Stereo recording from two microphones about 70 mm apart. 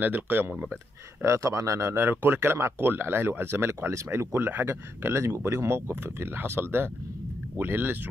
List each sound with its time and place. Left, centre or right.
0.0 s speech: right
1.2 s speech: right